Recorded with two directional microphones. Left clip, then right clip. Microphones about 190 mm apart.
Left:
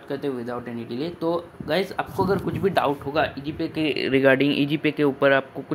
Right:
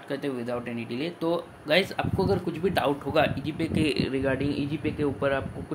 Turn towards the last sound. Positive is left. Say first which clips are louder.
# left 7 dB
turn(degrees=20)  # may be behind; listen again after turning